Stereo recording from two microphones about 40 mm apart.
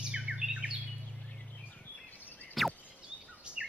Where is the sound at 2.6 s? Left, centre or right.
Centre.